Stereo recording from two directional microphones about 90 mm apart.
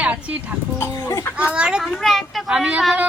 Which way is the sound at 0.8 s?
30° left (ahead or behind).